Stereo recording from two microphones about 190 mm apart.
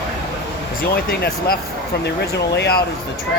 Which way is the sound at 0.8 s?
50° left (ahead or behind).